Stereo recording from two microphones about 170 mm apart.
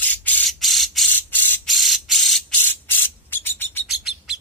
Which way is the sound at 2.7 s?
10° left (ahead or behind).